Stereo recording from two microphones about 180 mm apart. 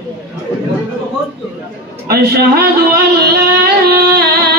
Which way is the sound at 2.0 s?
60° right (ahead or behind).